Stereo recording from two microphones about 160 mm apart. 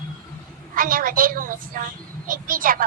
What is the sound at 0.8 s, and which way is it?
A woman's voice, 60° right (ahead or behind).